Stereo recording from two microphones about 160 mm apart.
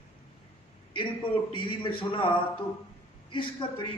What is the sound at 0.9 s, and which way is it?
A man's voice, 30° left (ahead or behind).